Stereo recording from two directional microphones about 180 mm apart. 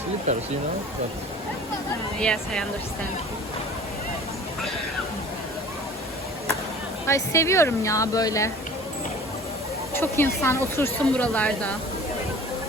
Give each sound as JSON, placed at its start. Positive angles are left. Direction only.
{"t": 2.1, "sound": "speech", "side_deg": 5}
{"t": 7.1, "sound": "speech", "side_deg": 15}
{"t": 9.9, "sound": "speech", "side_deg": 15}